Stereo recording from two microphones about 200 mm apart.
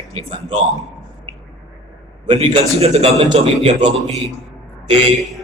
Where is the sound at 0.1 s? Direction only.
30° right (ahead or behind).